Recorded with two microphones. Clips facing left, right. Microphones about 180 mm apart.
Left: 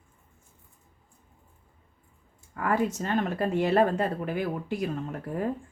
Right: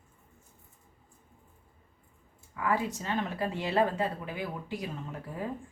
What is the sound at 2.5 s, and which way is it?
Speech, 50° left (ahead or behind).